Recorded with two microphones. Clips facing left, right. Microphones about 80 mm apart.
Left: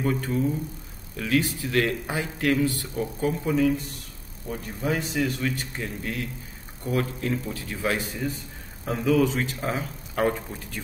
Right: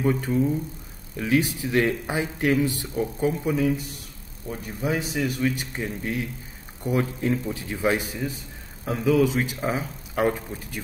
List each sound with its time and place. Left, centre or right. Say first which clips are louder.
0.0 s a man's voice: right 2 dB; centre
8.8 s a man's voice: right 1 dB; centre